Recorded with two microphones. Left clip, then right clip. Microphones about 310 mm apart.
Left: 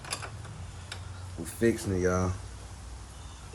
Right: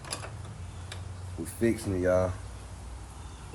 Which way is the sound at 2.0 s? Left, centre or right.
Left.